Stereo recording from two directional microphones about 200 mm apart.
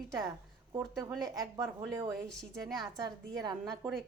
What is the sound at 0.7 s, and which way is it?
A woman's voice, 20° right (ahead or behind).